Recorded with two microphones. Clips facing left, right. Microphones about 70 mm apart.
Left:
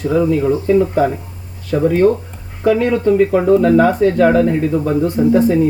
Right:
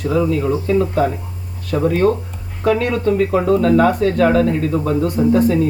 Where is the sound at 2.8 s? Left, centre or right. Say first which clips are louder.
Left 4 dB; centre.